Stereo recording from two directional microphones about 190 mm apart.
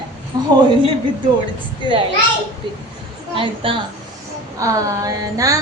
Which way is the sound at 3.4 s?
30° right (ahead or behind).